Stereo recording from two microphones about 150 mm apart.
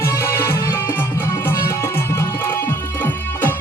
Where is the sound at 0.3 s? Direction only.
15° left (ahead or behind).